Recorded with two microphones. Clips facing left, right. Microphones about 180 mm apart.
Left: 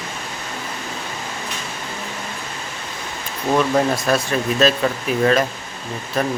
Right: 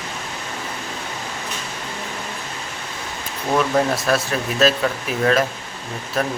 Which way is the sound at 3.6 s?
Centre (ahead or behind).